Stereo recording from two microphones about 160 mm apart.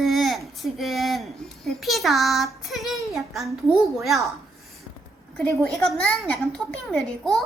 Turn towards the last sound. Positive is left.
turn(degrees=0)  # may be behind; listen again after turning